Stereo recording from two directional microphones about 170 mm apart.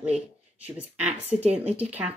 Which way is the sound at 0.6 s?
10° right (ahead or behind).